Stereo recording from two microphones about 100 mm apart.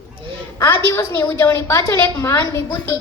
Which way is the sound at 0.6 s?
25° left (ahead or behind).